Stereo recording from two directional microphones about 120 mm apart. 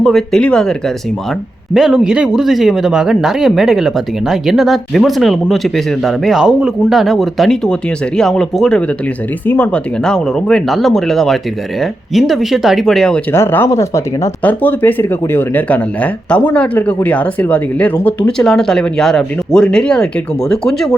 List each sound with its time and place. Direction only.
0.0 s speech: centre (ahead or behind)
13.3 s speech: 20° left (ahead or behind); by 20.9 s 5° left (ahead or behind)